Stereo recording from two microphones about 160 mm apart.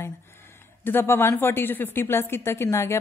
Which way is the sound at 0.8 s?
15° left (ahead or behind).